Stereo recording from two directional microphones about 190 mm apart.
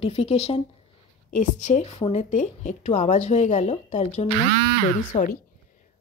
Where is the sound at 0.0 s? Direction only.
35° left (ahead or behind).